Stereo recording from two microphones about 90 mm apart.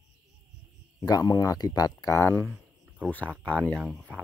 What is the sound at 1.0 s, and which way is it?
Speech, 45° left (ahead or behind).